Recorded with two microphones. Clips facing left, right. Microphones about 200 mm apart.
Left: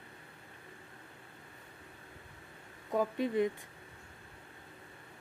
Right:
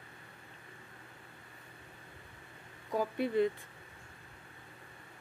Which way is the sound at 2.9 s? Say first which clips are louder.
Even; 20° left (ahead or behind).